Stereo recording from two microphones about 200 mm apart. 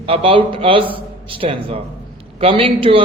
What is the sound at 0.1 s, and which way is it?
A man's voice, 25° right (ahead or behind).